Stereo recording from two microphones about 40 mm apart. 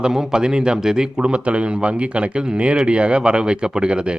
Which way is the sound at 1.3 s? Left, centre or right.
Right.